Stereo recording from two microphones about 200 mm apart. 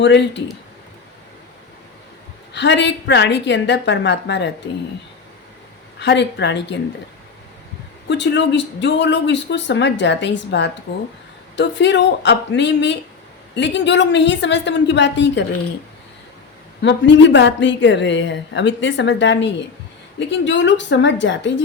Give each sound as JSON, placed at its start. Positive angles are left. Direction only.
{"t": 0.0, "sound": "a woman's voice", "side_deg": 60}
{"t": 2.5, "sound": "a woman's voice", "side_deg": 60}
{"t": 6.0, "sound": "a woman's voice", "side_deg": 60}
{"t": 8.1, "sound": "a woman's voice", "side_deg": 60}
{"t": 16.8, "sound": "a woman's voice", "side_deg": 60}